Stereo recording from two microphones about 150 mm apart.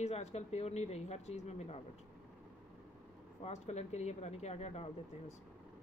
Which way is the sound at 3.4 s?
45° left (ahead or behind).